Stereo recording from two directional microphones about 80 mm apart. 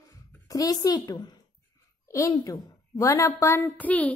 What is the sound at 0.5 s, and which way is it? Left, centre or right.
Speech, left.